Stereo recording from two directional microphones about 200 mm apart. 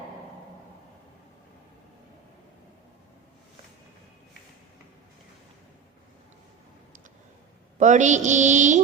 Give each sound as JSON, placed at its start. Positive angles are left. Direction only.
{"t": 7.8, "sound": "mantra", "side_deg": -35}